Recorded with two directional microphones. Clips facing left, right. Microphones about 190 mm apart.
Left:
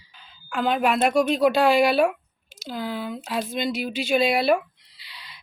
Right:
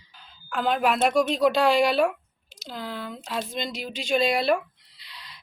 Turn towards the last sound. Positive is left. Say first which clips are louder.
# even
turn(degrees=0)  # may be behind; listen again after turning